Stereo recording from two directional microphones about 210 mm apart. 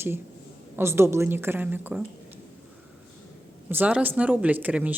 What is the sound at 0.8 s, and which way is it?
Speech, 10° right (ahead or behind).